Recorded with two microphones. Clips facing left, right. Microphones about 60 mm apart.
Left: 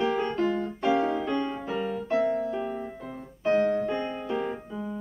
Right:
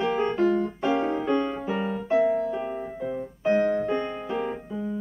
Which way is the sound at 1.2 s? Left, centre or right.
Centre.